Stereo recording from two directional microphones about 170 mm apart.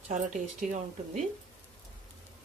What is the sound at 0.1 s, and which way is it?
Speech, 45° right (ahead or behind).